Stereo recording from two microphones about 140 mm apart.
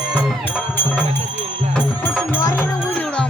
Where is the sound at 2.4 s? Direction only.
20° left (ahead or behind).